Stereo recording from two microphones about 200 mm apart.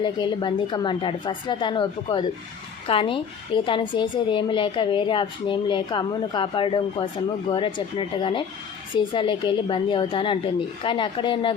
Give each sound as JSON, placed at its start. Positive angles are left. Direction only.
{"t": 0.0, "sound": "a woman's voice", "side_deg": 25}